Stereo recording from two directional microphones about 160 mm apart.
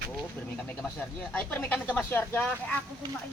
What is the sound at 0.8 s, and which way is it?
Speech, 10° left (ahead or behind).